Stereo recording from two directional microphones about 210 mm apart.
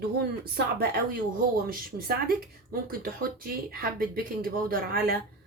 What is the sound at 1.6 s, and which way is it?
Speech, 45° right (ahead or behind).